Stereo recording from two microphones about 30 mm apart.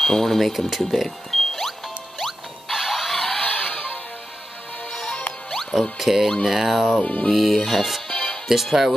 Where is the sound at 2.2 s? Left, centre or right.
Centre.